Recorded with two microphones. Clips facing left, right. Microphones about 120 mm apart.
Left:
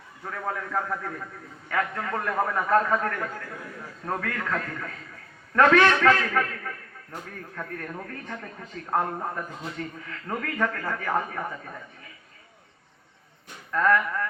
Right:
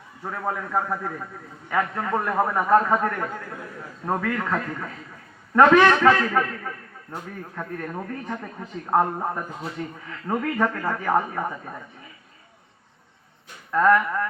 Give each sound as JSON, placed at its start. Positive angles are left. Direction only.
{"t": 0.3, "sound": "a man's voice", "side_deg": -25}
{"t": 13.7, "sound": "a man's voice", "side_deg": -30}